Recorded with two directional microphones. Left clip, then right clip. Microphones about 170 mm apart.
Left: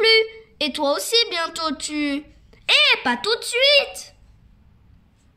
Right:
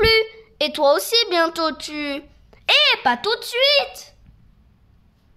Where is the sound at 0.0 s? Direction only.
55° right (ahead or behind).